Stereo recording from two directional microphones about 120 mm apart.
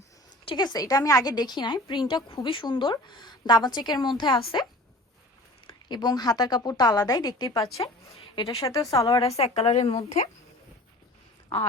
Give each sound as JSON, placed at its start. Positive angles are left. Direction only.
{"t": 0.4, "sound": "a woman's voice", "side_deg": 40}
{"t": 5.6, "sound": "a woman's voice", "side_deg": 35}
{"t": 9.3, "sound": "speech", "side_deg": 60}